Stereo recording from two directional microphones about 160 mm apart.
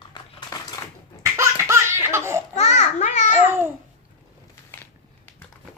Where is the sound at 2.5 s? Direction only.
45° left (ahead or behind).